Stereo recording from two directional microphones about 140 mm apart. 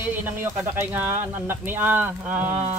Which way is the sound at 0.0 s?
15° right (ahead or behind).